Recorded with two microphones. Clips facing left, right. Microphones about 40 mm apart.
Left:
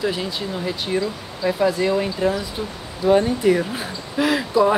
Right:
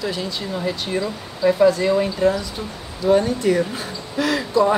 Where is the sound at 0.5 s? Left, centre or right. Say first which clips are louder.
Right 1 dB; centre.